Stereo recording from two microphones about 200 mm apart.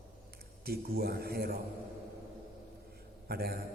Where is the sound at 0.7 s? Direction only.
50° right (ahead or behind).